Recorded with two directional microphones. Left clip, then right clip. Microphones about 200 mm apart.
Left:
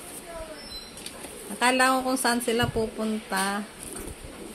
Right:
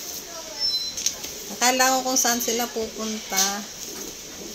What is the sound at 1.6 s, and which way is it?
Speech, 5° left (ahead or behind).